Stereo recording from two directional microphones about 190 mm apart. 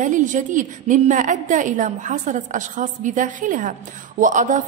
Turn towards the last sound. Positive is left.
turn(degrees=-40)  # may be behind; listen again after turning